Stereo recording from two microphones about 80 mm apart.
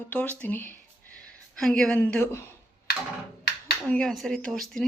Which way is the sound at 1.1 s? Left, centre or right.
Centre.